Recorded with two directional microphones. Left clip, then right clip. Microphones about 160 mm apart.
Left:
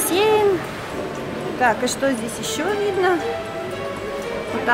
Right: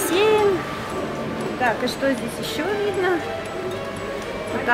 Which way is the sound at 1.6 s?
30° left (ahead or behind).